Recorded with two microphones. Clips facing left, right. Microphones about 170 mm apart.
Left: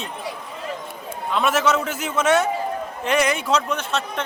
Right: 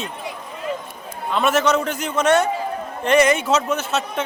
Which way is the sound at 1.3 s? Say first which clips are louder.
Right 2 dB; centre (ahead or behind).